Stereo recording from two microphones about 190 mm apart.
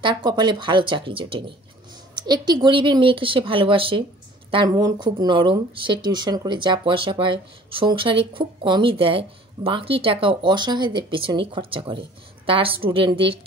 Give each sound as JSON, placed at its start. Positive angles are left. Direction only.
{"t": 0.0, "sound": "speech", "side_deg": -25}